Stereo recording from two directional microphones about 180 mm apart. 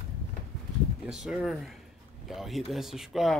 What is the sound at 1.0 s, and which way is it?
Speech, 5° right (ahead or behind).